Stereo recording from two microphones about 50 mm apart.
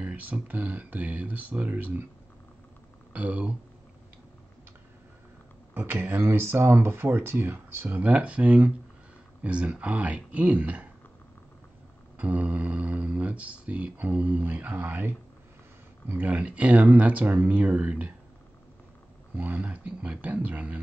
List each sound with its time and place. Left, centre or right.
0.0 s speech: right
3.1 s speech: right
5.8 s speech: right
8.0 s speech: right
12.2 s speech: right
19.3 s speech: right